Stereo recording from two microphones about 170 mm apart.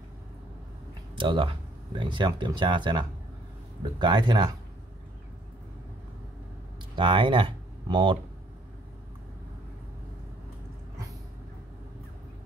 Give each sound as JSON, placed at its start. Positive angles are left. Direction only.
{"t": 1.1, "sound": "speech", "side_deg": -30}
{"t": 4.0, "sound": "speech", "side_deg": -25}
{"t": 7.0, "sound": "speech", "side_deg": -30}